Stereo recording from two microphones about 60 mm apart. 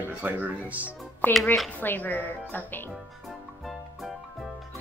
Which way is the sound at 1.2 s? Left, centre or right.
Left.